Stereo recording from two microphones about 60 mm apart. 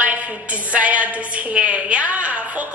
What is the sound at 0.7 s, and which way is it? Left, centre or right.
A woman's voice, right.